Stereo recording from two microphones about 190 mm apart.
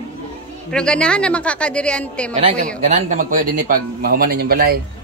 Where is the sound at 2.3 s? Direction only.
35° right (ahead or behind); by 4.7 s 55° right (ahead or behind).